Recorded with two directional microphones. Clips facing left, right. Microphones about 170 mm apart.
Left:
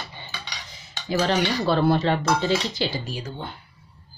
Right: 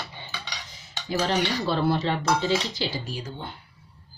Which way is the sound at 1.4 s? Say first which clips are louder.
Left 3 dB; 60° left (ahead or behind).